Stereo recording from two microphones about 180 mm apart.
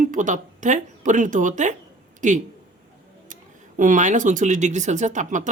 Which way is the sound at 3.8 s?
45° right (ahead or behind).